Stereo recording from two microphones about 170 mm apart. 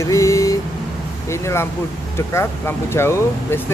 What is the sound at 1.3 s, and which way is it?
Speech, 15° left (ahead or behind).